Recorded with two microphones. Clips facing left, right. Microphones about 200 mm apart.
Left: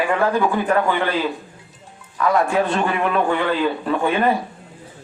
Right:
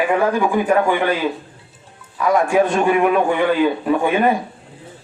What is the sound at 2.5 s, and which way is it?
A man's voice, 15° right (ahead or behind).